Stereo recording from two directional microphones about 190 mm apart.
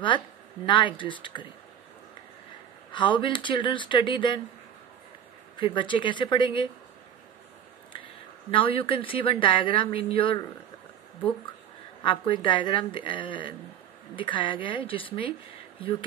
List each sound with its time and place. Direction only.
0.7 s a woman's voice: 25° left (ahead or behind)
2.9 s a woman's voice: 25° left (ahead or behind)
5.6 s a woman's voice: 25° left (ahead or behind)
7.9 s a woman's voice: 25° left (ahead or behind)
12.0 s a woman's voice: 25° left (ahead or behind)